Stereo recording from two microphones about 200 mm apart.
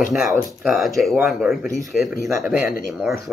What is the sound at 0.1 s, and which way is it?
Speech, centre (ahead or behind).